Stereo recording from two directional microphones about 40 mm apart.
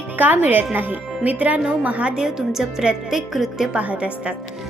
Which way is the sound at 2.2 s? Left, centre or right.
Centre.